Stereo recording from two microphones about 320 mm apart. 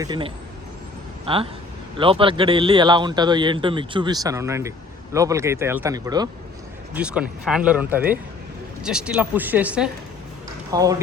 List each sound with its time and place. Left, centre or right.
0.0 s speech: centre